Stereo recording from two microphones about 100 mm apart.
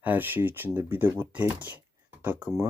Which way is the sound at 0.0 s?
20° right (ahead or behind).